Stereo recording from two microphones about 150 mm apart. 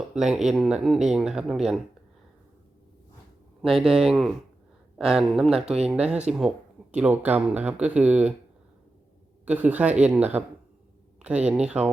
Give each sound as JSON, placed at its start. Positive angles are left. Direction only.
{"t": 0.1, "sound": "speech", "side_deg": -5}
{"t": 3.6, "sound": "speech", "side_deg": 0}
{"t": 5.5, "sound": "speech", "side_deg": -45}
{"t": 5.9, "sound": "speech", "side_deg": -10}
{"t": 9.5, "sound": "speech", "side_deg": -10}
{"t": 11.4, "sound": "speech", "side_deg": -5}